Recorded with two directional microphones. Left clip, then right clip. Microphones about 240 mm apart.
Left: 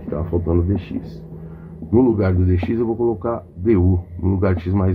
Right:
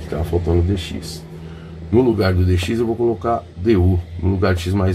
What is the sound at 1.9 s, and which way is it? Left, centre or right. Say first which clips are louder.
Speech: right 1 dB; centre.